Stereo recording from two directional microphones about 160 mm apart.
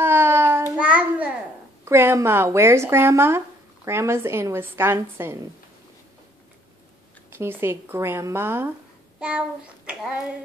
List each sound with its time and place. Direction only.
0.0 s a sound: 15° right (ahead or behind)
1.9 s speech: 15° right (ahead or behind)
7.2 s speech: 15° right (ahead or behind)